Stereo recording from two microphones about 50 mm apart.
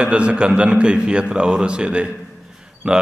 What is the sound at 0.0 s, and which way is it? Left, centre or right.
A man's voice, right.